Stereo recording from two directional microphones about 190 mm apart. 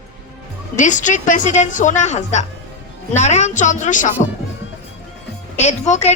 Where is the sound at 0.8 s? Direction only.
40° left (ahead or behind).